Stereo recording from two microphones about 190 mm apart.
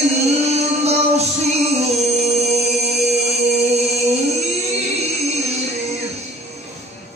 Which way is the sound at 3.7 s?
35° right (ahead or behind).